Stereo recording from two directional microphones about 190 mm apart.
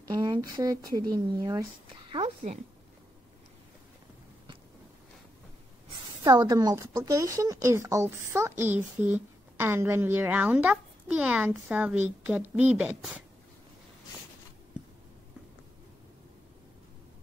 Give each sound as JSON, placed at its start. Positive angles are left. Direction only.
{"t": 0.1, "sound": "speech", "side_deg": -20}
{"t": 6.2, "sound": "a woman's voice", "side_deg": -20}